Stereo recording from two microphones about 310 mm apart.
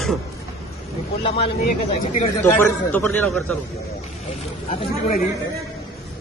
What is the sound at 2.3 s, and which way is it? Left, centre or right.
A man's voice, centre.